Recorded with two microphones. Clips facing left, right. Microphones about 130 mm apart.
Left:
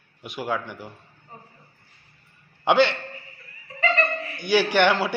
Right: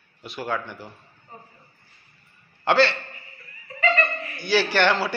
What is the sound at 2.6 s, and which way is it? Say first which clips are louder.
Speech: left 1 dB; 15° left (ahead or behind).